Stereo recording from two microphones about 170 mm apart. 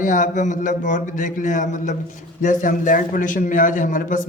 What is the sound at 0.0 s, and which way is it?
A man's voice, 50° left (ahead or behind).